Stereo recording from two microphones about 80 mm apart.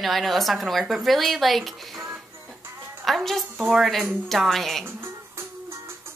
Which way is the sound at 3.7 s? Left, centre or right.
Centre.